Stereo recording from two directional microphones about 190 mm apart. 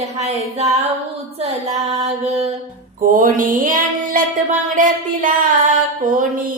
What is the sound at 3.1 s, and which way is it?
A woman's voice, 45° right (ahead or behind).